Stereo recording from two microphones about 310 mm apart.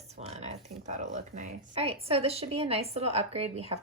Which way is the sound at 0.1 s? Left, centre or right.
Centre.